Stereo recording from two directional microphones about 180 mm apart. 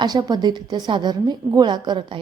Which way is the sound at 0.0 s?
20° right (ahead or behind).